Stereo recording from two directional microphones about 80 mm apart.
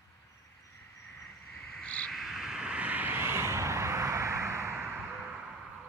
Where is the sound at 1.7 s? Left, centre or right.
Centre.